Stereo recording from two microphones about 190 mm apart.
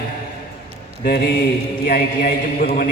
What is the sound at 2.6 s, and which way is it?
Speech, 40° left (ahead or behind).